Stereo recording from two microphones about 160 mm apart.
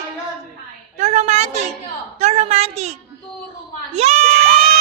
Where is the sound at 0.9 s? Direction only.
45° right (ahead or behind).